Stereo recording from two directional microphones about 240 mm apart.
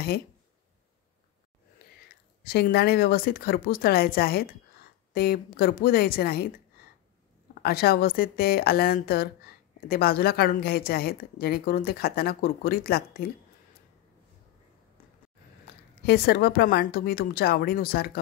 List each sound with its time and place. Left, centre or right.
2.4 s speech: left
7.6 s speech: left
16.1 s speech: left